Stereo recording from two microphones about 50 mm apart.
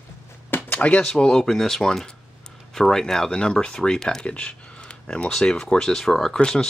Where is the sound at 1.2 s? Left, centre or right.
Centre.